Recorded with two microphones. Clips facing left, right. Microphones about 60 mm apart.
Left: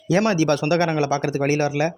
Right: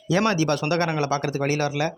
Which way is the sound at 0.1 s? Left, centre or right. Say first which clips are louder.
Left 3 dB; left.